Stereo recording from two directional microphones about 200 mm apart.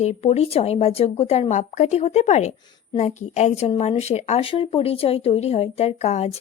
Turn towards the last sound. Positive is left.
turn(degrees=35)  # may be behind; listen again after turning